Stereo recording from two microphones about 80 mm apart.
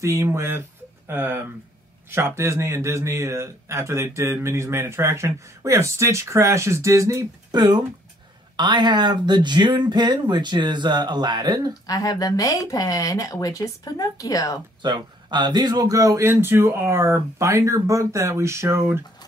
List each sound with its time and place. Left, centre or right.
0.0 s speech: right
7.5 s speech: right
8.5 s speech: right
11.9 s speech: left
14.8 s speech: right
15.9 s speech: right